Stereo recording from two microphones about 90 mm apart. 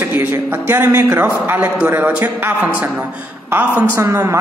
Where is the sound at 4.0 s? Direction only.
35° right (ahead or behind).